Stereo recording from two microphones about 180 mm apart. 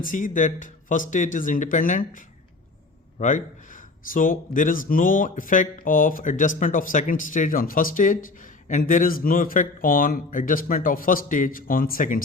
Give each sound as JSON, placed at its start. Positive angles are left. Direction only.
{"t": 0.0, "sound": "speech", "side_deg": 45}